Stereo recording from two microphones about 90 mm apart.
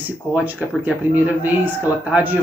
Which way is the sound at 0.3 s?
20° right (ahead or behind).